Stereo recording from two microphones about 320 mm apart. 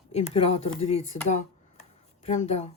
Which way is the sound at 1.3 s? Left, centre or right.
Left.